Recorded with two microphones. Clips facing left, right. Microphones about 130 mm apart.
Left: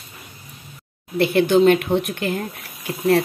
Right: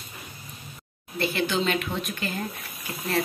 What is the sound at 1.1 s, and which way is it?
Speech, 60° left (ahead or behind).